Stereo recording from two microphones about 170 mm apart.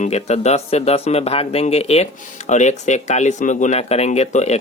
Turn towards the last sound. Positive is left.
turn(degrees=40)  # may be behind; listen again after turning